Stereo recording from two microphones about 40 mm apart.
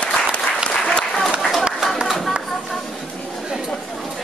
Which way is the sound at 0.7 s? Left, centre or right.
Left.